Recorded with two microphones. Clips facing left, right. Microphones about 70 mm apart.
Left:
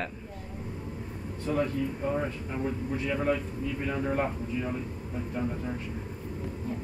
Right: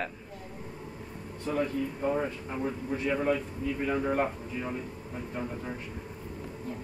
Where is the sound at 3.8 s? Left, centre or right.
Centre.